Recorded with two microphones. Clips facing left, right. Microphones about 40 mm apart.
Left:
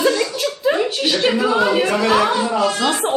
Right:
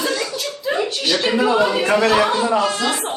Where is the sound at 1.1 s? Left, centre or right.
Centre.